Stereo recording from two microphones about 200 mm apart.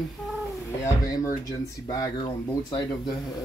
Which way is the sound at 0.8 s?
15° left (ahead or behind).